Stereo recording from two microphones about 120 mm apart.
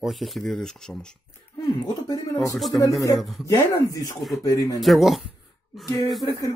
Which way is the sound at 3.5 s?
30° left (ahead or behind).